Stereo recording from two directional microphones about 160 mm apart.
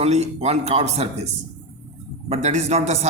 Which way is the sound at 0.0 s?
45° right (ahead or behind).